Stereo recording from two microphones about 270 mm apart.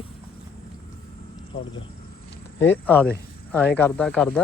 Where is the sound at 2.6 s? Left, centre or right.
Centre.